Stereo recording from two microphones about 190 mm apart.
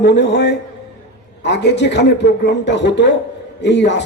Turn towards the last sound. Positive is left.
turn(degrees=65)  # may be behind; listen again after turning